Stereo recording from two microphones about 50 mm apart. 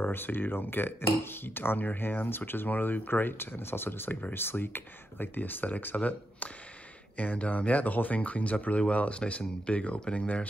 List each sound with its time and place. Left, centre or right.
0.0 s speech: left
5.9 s speech: left